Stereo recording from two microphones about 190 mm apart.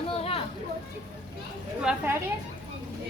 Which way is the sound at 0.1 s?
30° left (ahead or behind).